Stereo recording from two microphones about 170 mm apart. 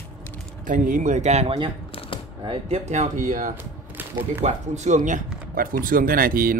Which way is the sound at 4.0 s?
10° right (ahead or behind).